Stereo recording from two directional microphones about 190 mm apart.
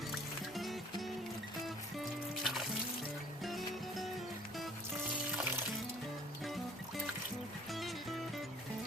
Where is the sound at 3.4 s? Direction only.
Centre (ahead or behind).